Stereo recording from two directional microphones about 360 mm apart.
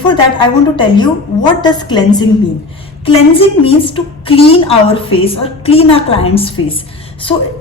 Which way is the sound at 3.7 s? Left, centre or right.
Centre.